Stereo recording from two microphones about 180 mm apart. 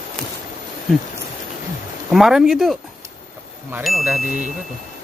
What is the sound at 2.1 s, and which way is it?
Speech, centre (ahead or behind).